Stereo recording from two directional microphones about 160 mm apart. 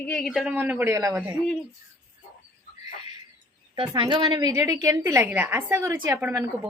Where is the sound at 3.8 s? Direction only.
30° right (ahead or behind).